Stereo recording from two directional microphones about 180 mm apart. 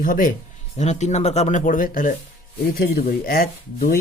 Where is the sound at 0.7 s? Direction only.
40° left (ahead or behind).